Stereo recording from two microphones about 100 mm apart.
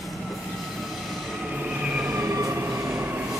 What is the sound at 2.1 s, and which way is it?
Train, 25° right (ahead or behind).